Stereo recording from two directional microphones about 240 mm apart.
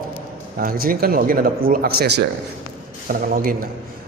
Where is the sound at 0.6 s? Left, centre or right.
Right.